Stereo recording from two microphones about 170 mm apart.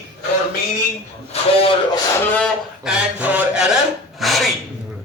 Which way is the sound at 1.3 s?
35° left (ahead or behind).